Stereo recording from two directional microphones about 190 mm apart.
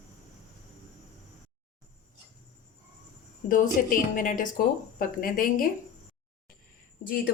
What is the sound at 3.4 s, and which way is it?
Speech, 45° left (ahead or behind).